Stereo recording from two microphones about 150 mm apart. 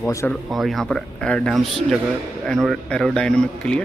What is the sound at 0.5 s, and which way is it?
A man's voice, centre (ahead or behind).